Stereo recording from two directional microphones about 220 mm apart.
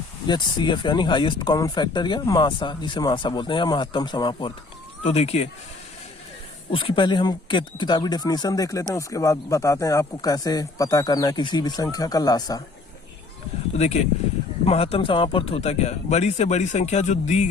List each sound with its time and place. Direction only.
0.3 s speech: 20° left (ahead or behind)
6.7 s speech: 25° left (ahead or behind)
13.7 s speech: 30° left (ahead or behind)